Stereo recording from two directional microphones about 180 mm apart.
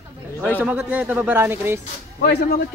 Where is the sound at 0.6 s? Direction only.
10° right (ahead or behind).